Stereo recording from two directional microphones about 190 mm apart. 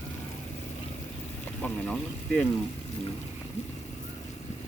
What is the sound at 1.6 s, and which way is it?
Speech, 5° left (ahead or behind).